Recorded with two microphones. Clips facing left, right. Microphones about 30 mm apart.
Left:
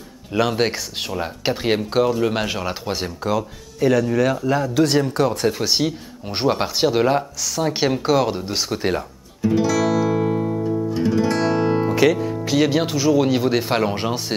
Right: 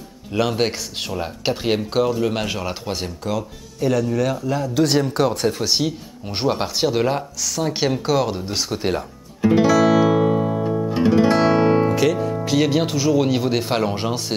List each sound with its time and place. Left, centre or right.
0.3 s speech: centre
5.5 s speech: centre
9.4 s music: right
9.8 s guitar: centre
10.5 s music: right
11.9 s music: centre
12.4 s speech: centre